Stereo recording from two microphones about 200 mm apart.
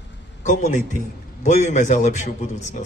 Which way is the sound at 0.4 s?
35° left (ahead or behind).